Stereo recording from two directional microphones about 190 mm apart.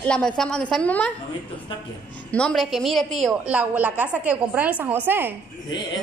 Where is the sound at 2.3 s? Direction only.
5° left (ahead or behind).